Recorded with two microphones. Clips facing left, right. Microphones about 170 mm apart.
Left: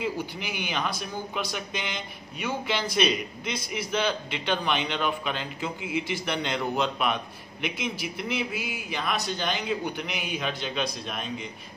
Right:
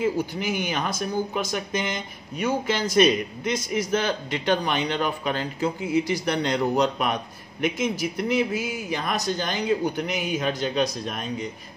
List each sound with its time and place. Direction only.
0.0 s a man's voice: 45° right (ahead or behind)